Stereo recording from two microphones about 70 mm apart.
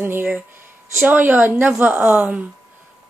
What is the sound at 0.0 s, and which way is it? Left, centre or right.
A woman's voice, right.